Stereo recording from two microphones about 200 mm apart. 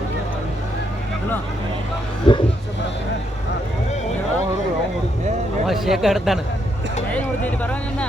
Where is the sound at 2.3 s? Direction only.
25° left (ahead or behind).